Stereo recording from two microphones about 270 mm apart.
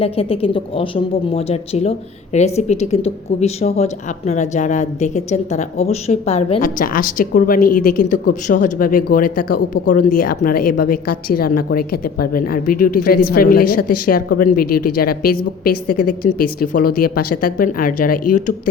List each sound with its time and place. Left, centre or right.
0.0 s a woman's voice: left